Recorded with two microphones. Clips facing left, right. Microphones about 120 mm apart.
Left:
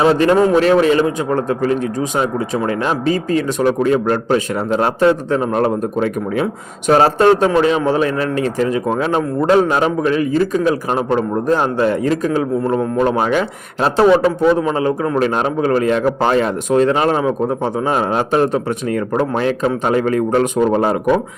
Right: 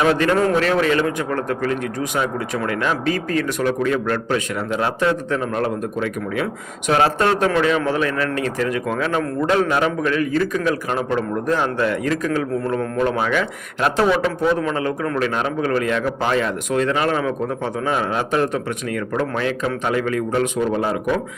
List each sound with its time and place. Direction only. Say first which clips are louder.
0.0 s a man's voice: left 5 dB; 25° left (ahead or behind)
10.7 s a man's voice: left 4 dB; 35° left (ahead or behind)